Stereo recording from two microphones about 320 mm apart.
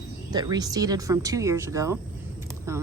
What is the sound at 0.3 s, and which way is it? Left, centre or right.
Speech, centre.